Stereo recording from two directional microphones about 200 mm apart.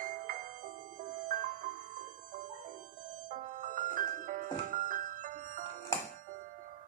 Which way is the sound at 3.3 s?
40° right (ahead or behind).